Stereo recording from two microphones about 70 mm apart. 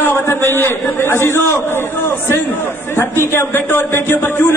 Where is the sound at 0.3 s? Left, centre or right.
Left.